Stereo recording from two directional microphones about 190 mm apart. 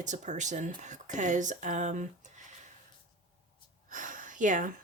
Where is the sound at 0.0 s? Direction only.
40° right (ahead or behind).